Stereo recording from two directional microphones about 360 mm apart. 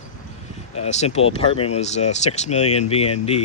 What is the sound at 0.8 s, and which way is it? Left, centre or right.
Speech, centre.